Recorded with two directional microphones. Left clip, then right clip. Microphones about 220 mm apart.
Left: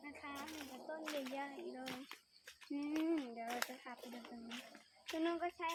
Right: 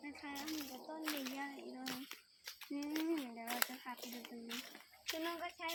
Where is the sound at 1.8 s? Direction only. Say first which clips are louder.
Right 2 dB; 30° right (ahead or behind).